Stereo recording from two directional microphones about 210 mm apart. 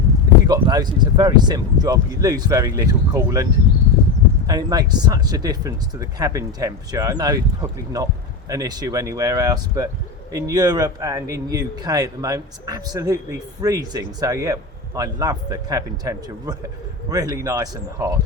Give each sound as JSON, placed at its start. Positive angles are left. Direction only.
{"t": 0.4, "sound": "speech", "side_deg": -20}
{"t": 4.4, "sound": "a man's voice", "side_deg": -20}